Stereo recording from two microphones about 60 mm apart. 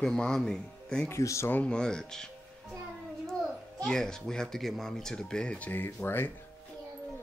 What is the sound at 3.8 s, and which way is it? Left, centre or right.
Speech, centre.